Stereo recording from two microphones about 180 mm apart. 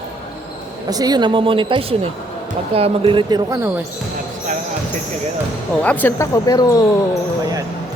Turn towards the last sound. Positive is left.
turn(degrees=20)  # may be behind; listen again after turning